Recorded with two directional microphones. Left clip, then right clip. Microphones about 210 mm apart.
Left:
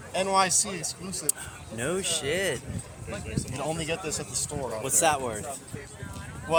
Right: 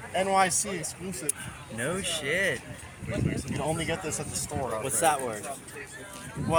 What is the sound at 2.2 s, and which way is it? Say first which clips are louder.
Speech: right 1 dB; 10° left (ahead or behind).